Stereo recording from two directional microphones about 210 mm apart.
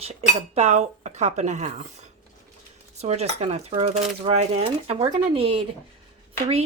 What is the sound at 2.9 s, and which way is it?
Speech, 30° right (ahead or behind).